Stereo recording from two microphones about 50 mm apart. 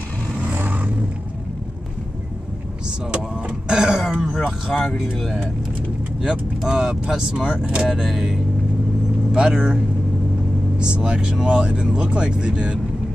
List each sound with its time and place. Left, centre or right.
0.5 s vehicle: right
3.1 s vehicle: right
4.0 s speech: centre
6.2 s speech: centre
7.9 s speech: centre
9.3 s speech: centre
10.8 s speech: centre